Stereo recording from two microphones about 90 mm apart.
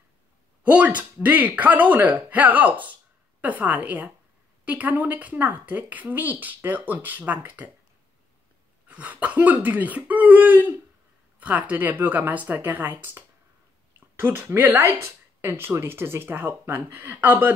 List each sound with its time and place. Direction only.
0.7 s speech: 15° right (ahead or behind)
8.8 s speech: 15° right (ahead or behind)